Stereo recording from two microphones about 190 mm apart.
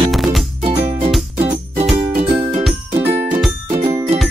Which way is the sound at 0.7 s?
30° right (ahead or behind).